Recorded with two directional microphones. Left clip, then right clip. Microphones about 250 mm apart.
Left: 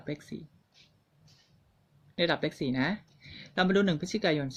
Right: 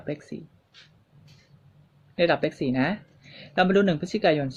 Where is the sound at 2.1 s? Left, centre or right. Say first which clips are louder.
Right 6 dB; centre.